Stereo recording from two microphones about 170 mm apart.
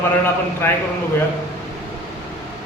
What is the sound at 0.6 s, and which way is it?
Speech, 10° left (ahead or behind).